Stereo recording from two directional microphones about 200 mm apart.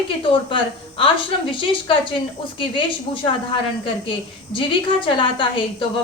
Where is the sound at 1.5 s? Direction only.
25° left (ahead or behind).